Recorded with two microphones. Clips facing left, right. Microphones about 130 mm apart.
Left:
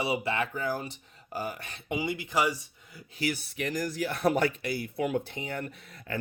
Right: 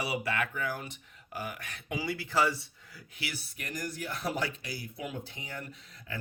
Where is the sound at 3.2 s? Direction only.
40° left (ahead or behind).